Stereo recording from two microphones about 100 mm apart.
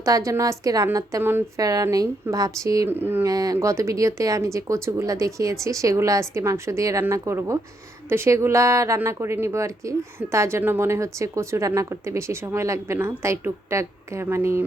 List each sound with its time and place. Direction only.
0.0 s speech: 35° right (ahead or behind)
1.2 s speech: 20° right (ahead or behind)
1.5 s speech: 35° right (ahead or behind)
2.9 s speech: 20° right (ahead or behind)
3.2 s speech: 35° right (ahead or behind)